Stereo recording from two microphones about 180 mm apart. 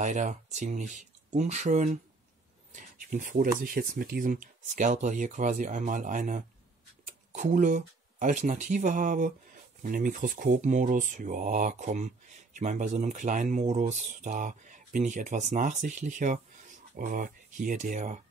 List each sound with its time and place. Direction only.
0.0 s speech: 40° right (ahead or behind)